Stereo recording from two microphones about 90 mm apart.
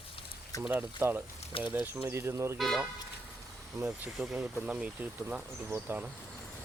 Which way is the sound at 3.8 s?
35° right (ahead or behind).